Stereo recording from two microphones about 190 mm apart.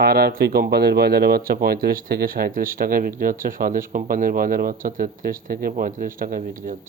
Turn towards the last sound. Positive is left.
turn(degrees=-45)  # may be behind; listen again after turning